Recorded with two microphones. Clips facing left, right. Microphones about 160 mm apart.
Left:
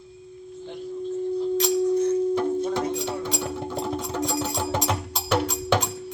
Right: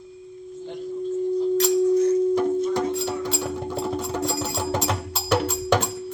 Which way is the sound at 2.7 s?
5° right (ahead or behind).